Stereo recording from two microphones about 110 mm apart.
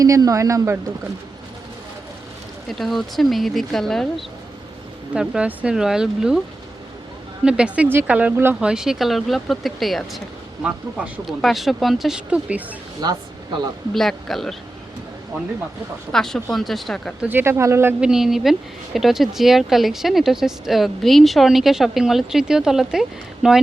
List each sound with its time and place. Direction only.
0.0 s speech: 30° right (ahead or behind)
2.6 s speech: centre (ahead or behind)
5.1 s speech: 5° right (ahead or behind)
7.4 s speech: 10° right (ahead or behind)
8.6 s speech: 5° right (ahead or behind)
13.0 s speech: 40° right (ahead or behind)
13.9 s speech: 5° left (ahead or behind)
16.1 s speech: 5° left (ahead or behind)
17.2 s speech: 20° right (ahead or behind)
18.0 s speech: 5° right (ahead or behind)